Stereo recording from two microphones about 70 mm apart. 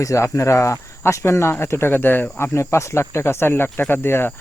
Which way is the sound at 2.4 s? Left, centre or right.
Left.